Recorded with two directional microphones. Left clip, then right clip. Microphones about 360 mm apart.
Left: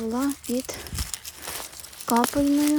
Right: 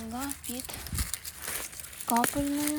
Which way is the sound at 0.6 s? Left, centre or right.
Centre.